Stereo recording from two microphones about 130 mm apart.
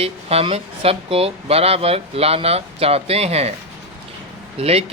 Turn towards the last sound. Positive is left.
turn(degrees=-50)  # may be behind; listen again after turning